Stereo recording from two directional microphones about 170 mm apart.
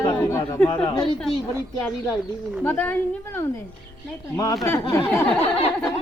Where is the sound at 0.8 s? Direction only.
30° left (ahead or behind).